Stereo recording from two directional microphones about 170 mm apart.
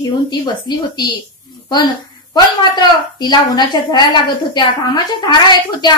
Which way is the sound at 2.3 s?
25° left (ahead or behind).